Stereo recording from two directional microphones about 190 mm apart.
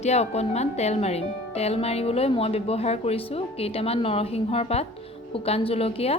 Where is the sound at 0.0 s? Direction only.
35° left (ahead or behind).